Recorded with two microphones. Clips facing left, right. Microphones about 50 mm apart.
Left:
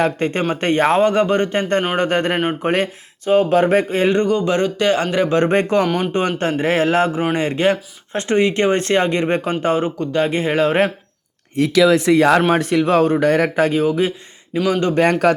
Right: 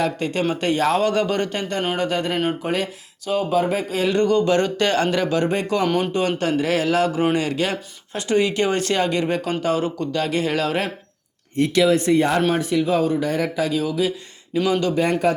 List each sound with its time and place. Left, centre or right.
0.0 s speech: left
2.0 s speech: left
3.5 s speech: left
3.8 s speech: left
4.3 s a man's voice: left
5.3 s speech: left
11.5 s speech: left
12.5 s speech: left
14.9 s speech: left